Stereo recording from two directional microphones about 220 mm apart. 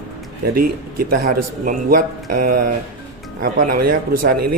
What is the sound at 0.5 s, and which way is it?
Speech, 40° right (ahead or behind).